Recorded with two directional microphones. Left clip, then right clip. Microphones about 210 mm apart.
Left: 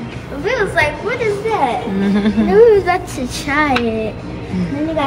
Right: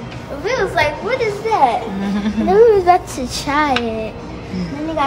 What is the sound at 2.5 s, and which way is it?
Speech, 30° right (ahead or behind).